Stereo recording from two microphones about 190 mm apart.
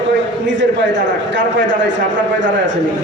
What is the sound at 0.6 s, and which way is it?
A man's voice, 75° right (ahead or behind).